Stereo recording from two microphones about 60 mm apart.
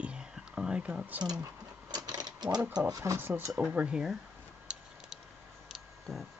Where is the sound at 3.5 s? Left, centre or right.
Right.